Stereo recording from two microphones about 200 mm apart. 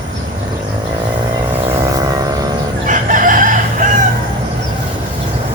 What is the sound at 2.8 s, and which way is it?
Chicken, 40° right (ahead or behind).